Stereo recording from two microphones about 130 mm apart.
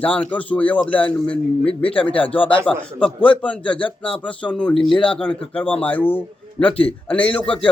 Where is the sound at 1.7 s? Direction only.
45° left (ahead or behind).